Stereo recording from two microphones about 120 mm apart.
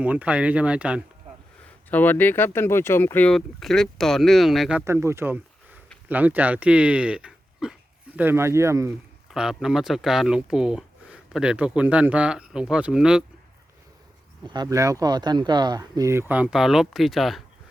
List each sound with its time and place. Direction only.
0.0 s speech: 10° right (ahead or behind)
1.9 s speech: 15° left (ahead or behind)
3.3 s speech: centre (ahead or behind)
4.9 s speech: 20° right (ahead or behind)
9.3 s speech: 5° right (ahead or behind)
14.4 s speech: 35° right (ahead or behind); by 17.4 s centre (ahead or behind)